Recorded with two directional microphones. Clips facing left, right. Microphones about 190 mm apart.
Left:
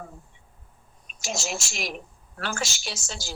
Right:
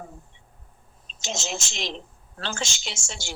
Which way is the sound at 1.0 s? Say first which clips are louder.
Left 1 dB; 20° right (ahead or behind).